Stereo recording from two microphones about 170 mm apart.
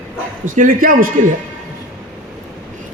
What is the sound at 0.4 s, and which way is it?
Speech, 50° right (ahead or behind).